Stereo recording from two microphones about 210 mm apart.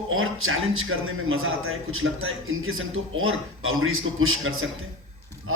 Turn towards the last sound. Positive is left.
turn(degrees=-75)  # may be behind; listen again after turning